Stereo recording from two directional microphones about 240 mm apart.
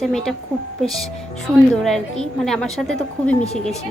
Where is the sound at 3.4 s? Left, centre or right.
Left.